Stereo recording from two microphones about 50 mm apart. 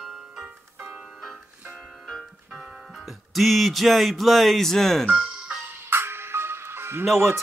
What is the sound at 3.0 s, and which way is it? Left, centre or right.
Music, centre.